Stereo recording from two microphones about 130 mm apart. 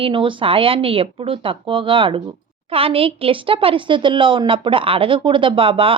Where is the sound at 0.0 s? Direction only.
40° right (ahead or behind).